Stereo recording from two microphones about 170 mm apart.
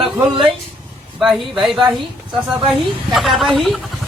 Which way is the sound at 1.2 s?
Centre (ahead or behind).